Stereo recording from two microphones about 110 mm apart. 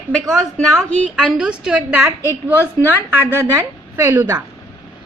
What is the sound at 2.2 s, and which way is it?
Speech, 20° left (ahead or behind).